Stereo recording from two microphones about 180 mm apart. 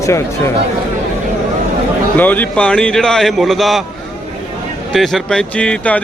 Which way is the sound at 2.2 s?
10° left (ahead or behind).